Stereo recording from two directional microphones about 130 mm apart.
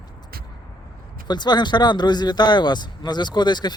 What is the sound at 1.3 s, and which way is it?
Speech, 35° left (ahead or behind).